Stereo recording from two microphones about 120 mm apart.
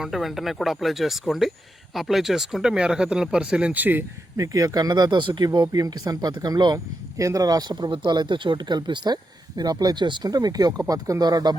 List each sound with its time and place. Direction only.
0.0 s speech: centre (ahead or behind)
4.4 s speech: 30° right (ahead or behind)